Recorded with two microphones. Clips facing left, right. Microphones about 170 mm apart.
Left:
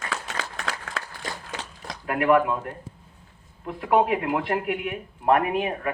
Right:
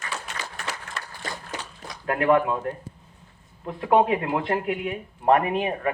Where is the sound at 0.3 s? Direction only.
90° left.